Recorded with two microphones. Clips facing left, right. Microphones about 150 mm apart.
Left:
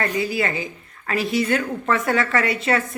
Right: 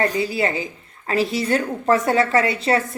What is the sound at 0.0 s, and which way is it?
A woman's voice, 30° right (ahead or behind).